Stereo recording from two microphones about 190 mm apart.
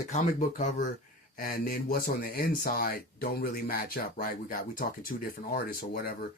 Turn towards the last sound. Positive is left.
turn(degrees=50)  # may be behind; listen again after turning